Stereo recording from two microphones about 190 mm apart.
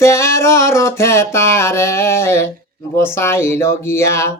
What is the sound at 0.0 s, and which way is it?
Mantra, 15° left (ahead or behind).